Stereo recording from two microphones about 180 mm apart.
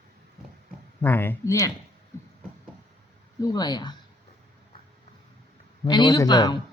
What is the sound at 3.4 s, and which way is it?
Speech, 20° left (ahead or behind).